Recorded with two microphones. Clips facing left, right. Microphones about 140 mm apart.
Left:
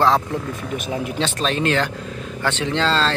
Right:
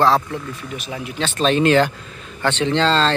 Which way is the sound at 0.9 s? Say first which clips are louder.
Left 5 dB; 50° left (ahead or behind).